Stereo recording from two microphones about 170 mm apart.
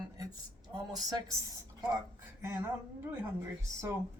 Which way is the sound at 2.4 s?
15° right (ahead or behind).